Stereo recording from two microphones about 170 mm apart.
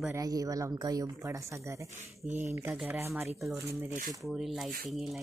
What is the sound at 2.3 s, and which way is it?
Speech, 45° right (ahead or behind).